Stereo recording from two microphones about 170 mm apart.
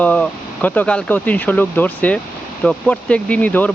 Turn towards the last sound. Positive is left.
turn(degrees=10)  # may be behind; listen again after turning